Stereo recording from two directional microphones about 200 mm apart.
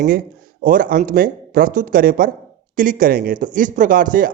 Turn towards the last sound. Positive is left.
turn(degrees=-45)  # may be behind; listen again after turning